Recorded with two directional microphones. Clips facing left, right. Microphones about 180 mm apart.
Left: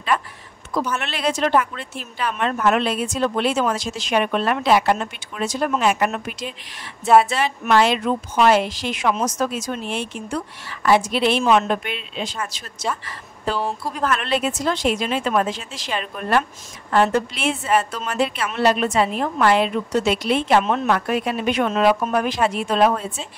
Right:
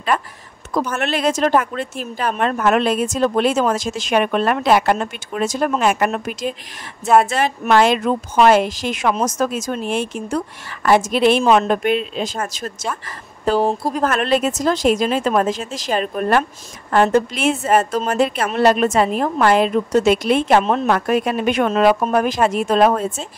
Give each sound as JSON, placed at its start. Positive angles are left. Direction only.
{"t": 0.7, "sound": "a woman's voice", "side_deg": -45}